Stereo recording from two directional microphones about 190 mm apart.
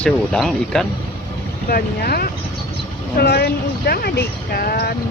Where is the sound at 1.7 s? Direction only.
55° left (ahead or behind).